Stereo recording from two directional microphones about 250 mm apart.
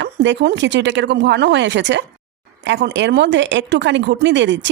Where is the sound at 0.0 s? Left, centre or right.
Right.